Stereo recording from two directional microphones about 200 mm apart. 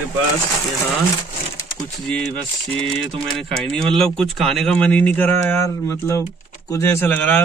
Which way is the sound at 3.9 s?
Centre (ahead or behind).